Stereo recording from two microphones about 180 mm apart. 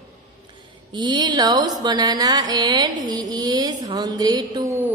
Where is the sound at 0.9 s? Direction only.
25° right (ahead or behind).